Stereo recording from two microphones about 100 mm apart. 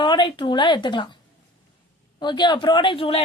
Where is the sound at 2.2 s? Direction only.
45° left (ahead or behind); by 3.2 s 65° left (ahead or behind).